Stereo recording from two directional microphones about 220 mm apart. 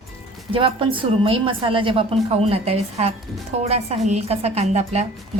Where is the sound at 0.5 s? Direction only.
25° right (ahead or behind).